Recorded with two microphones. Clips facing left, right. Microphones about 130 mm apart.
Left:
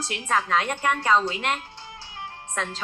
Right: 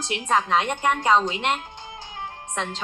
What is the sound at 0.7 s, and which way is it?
Speech, 15° right (ahead or behind).